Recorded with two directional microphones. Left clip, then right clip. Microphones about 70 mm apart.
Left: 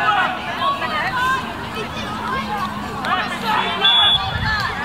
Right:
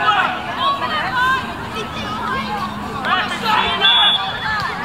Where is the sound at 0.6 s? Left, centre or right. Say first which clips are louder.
Right 2 dB; right.